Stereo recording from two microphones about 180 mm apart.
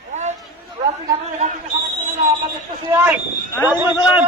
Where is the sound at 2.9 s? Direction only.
10° right (ahead or behind).